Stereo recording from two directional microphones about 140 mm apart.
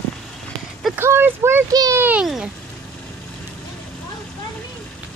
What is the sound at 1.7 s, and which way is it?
Speech, 25° right (ahead or behind).